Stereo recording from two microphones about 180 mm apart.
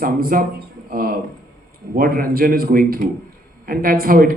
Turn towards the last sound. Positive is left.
turn(degrees=-55)  # may be behind; listen again after turning